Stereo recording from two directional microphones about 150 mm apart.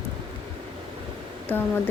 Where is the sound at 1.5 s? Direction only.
10° left (ahead or behind).